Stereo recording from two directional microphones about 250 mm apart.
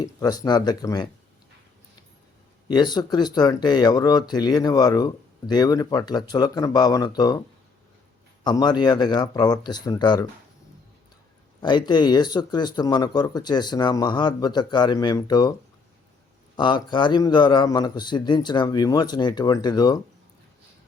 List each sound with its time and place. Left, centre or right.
0.0 s speech: centre
2.6 s speech: centre
8.4 s speech: centre
11.6 s speech: centre
16.6 s speech: centre